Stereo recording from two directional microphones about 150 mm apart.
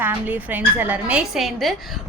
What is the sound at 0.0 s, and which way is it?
A woman's voice, 10° right (ahead or behind).